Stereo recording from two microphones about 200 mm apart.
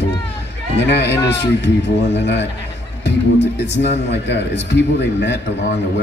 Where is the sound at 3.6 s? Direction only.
60° left (ahead or behind).